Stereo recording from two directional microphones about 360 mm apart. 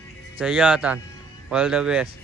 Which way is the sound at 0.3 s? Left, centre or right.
Centre.